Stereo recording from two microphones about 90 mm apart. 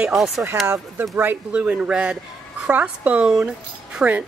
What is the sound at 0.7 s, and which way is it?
Speech, 25° right (ahead or behind).